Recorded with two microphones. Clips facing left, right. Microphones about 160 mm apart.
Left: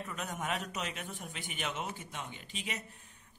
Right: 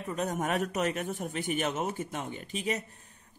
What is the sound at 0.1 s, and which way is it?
Speech, 40° right (ahead or behind).